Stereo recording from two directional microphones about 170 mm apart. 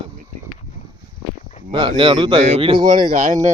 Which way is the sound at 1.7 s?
30° right (ahead or behind).